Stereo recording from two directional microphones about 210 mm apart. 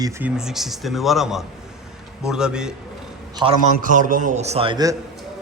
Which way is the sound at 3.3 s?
25° right (ahead or behind).